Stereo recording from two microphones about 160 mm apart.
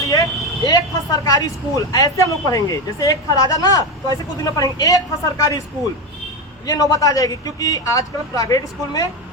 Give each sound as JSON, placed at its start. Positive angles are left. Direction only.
{"t": 0.0, "sound": "speech", "side_deg": 20}
{"t": 6.7, "sound": "speech", "side_deg": 20}